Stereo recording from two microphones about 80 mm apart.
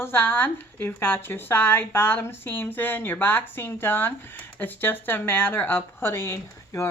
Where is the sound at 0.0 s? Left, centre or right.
Left.